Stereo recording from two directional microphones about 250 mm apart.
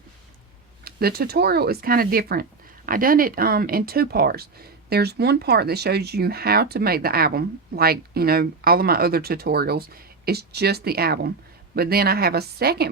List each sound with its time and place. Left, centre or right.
0.9 s speech: right